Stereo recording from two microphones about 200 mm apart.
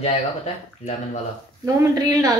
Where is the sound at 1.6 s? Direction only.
15° right (ahead or behind).